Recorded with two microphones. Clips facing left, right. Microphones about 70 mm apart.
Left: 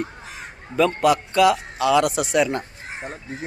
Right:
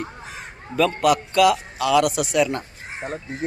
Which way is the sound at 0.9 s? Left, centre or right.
Left.